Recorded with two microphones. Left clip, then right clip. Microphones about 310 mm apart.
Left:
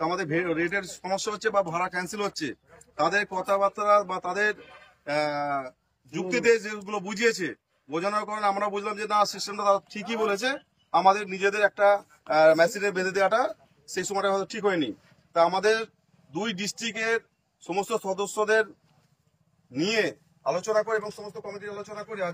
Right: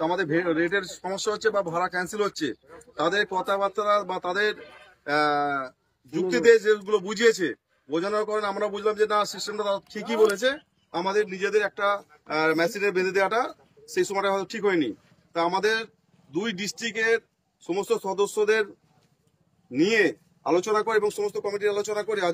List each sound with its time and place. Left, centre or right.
0.0 s a man's voice: centre
0.8 s speech: left
1.2 s a man's voice: centre
10.2 s a man's voice: centre
19.7 s speech: centre; by 22.3 s right